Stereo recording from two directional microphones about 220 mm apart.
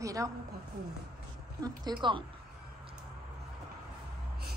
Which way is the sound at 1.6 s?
20° right (ahead or behind).